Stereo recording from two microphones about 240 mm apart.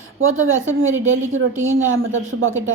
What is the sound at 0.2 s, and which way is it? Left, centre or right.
A woman's voice, right.